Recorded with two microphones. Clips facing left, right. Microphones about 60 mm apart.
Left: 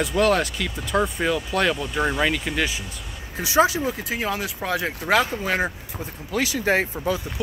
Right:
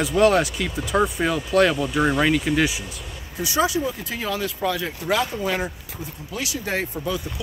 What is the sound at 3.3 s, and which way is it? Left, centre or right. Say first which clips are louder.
Speech: left 3 dB; left.